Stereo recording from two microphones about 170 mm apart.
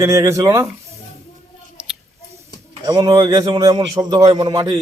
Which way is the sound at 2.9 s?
20° right (ahead or behind).